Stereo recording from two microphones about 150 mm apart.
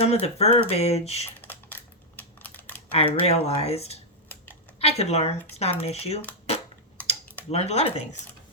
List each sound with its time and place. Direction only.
0.0 s speech: 45° left (ahead or behind)
1.4 s typing: 10° left (ahead or behind)
2.9 s speech: 40° left (ahead or behind)
7.5 s speech: 45° left (ahead or behind)